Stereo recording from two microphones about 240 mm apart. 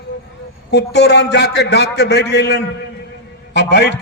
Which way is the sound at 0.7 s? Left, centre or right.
Left.